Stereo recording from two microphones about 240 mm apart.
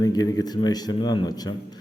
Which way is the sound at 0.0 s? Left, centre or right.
Centre.